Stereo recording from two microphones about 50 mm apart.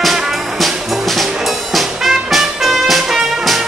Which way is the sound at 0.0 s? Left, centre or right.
Centre.